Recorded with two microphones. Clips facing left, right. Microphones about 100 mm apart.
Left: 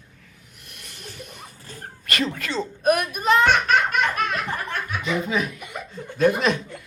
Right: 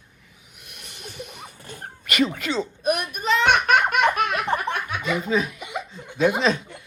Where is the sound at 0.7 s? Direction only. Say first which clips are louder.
Right 1 dB; 55° left (ahead or behind).